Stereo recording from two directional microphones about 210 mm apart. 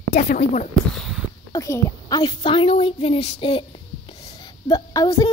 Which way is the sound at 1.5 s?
15° left (ahead or behind).